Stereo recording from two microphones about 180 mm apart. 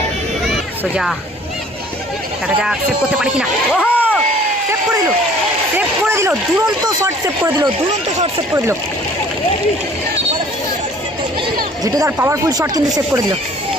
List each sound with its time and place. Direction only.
2.6 s speech: 5° right (ahead or behind)
5.7 s a sound: 15° right (ahead or behind)
7.0 s speech: 20° right (ahead or behind)
11.8 s speech: 20° right (ahead or behind)